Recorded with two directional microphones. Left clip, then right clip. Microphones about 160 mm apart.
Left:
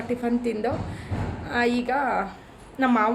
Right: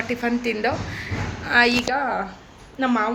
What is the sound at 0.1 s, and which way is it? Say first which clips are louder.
A woman's voice: left 1 dB; 5° left (ahead or behind).